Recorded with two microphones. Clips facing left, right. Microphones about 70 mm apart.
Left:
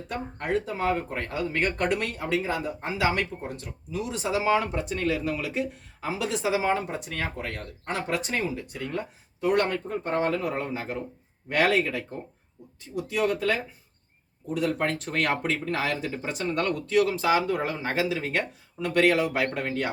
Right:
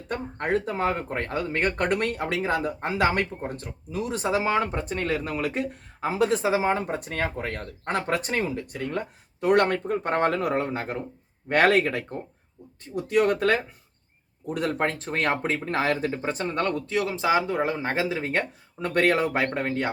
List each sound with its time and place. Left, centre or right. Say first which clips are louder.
0.1 s speech: right 2 dB; right
14.7 s speech: right 1 dB; right